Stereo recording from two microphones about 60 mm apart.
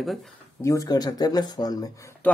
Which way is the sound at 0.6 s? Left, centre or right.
Left.